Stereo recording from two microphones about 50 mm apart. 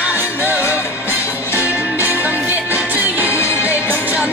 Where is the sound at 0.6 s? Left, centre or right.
Left.